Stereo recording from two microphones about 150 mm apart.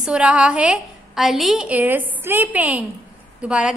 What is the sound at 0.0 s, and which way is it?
A woman's voice, 5° right (ahead or behind).